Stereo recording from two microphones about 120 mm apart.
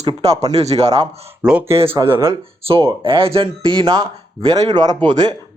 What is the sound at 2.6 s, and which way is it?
Speech, 50° right (ahead or behind).